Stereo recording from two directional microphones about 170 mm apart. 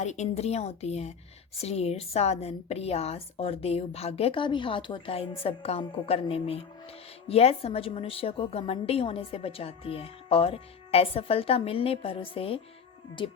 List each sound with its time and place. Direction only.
0.0 s a woman's voice: 45° left (ahead or behind)